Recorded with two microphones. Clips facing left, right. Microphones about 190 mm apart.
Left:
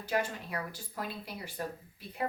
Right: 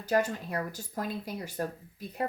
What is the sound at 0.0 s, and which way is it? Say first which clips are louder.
Speech: right 5 dB; 40° right (ahead or behind).